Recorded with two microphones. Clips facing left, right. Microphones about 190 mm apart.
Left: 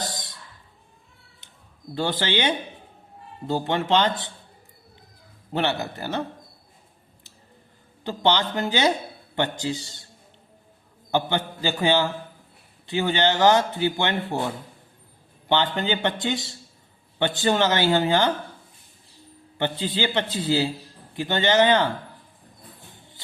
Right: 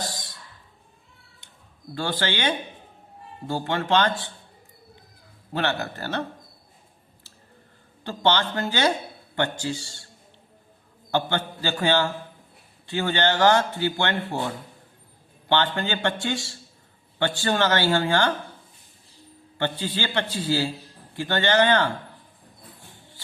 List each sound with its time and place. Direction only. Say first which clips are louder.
2.0 s speech: left 2 dB; 20° left (ahead or behind)
5.5 s speech: left 1 dB; 15° left (ahead or behind)
8.0 s speech: left 1 dB; 15° left (ahead or behind)
11.1 s speech: left 1 dB; 15° left (ahead or behind)
19.5 s speech: left 2 dB; 20° left (ahead or behind)